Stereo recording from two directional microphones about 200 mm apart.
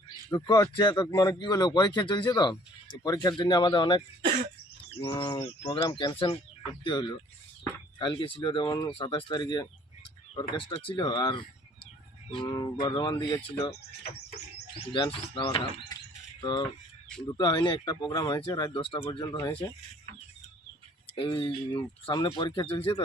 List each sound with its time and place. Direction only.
0.3 s speech: 20° left (ahead or behind)
21.2 s speech: 25° left (ahead or behind)